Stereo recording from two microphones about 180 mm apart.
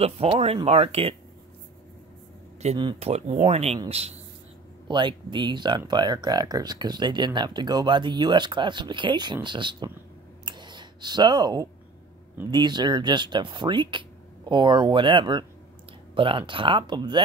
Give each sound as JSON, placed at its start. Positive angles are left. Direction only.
{"t": 0.0, "sound": "speech", "side_deg": -35}
{"t": 2.6, "sound": "speech", "side_deg": -30}
{"t": 10.4, "sound": "clicking", "side_deg": -25}
{"t": 12.4, "sound": "speech", "side_deg": -25}